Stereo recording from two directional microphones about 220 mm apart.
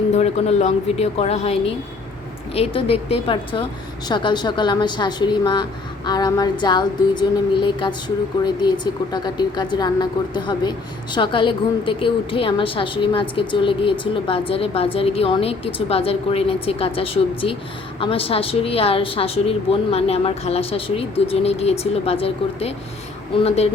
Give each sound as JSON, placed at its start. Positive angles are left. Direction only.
{"t": 0.1, "sound": "speech", "side_deg": 30}